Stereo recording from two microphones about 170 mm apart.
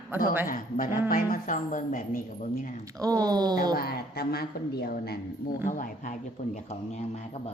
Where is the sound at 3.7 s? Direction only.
65° left (ahead or behind).